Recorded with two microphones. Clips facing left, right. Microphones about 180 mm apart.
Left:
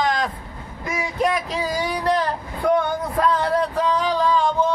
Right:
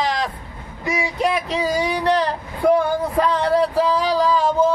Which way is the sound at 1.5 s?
25° right (ahead or behind).